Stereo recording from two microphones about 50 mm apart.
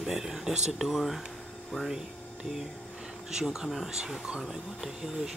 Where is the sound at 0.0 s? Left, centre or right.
Centre.